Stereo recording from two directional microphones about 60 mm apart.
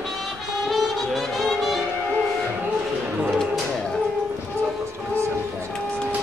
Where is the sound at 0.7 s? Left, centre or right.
Centre.